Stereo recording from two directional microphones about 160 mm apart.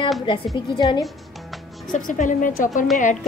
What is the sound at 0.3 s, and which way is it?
Speech, 30° left (ahead or behind).